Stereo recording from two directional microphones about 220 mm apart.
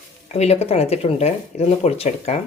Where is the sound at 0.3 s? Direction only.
30° left (ahead or behind).